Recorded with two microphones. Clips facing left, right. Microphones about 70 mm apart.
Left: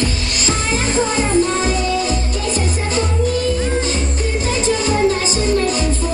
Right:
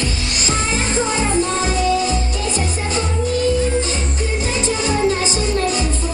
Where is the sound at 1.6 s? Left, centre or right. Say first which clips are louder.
Right 1 dB; right.